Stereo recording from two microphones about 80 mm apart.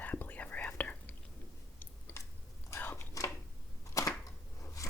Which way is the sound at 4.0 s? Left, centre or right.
Left.